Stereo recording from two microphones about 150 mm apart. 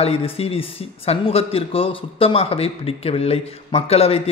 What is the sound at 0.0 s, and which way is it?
A man's voice, 40° left (ahead or behind).